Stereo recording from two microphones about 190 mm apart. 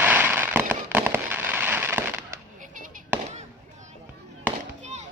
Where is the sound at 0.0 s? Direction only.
10° right (ahead or behind).